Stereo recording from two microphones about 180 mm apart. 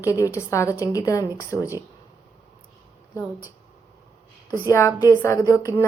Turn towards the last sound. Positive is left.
turn(degrees=15)  # may be behind; listen again after turning